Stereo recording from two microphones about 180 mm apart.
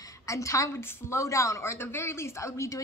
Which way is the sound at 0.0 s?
15° left (ahead or behind).